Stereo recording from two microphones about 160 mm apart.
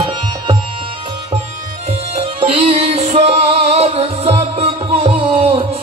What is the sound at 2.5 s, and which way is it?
Music, 35° right (ahead or behind).